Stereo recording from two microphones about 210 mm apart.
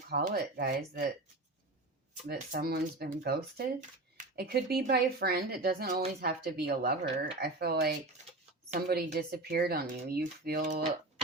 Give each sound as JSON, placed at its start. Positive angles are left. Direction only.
{"t": 0.1, "sound": "speech", "side_deg": -45}
{"t": 2.2, "sound": "speech", "side_deg": -45}